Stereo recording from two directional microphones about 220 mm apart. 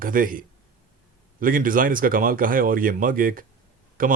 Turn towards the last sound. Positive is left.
turn(degrees=-40)  # may be behind; listen again after turning